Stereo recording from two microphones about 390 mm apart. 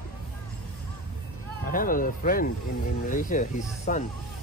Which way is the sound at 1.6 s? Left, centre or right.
Left.